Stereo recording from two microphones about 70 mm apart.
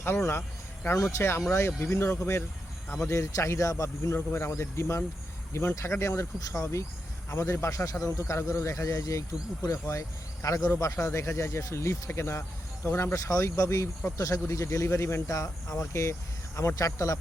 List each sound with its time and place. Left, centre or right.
0.0 s speech: left
1.5 s speech: left